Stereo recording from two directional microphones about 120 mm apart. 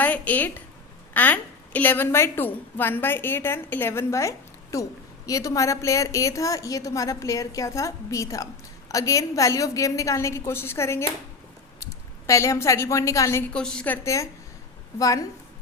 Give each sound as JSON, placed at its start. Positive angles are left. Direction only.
{"t": 0.0, "sound": "a woman's voice", "side_deg": 15}
{"t": 13.5, "sound": "a woman's voice", "side_deg": 5}